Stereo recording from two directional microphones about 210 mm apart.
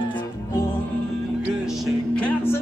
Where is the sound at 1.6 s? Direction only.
Centre (ahead or behind).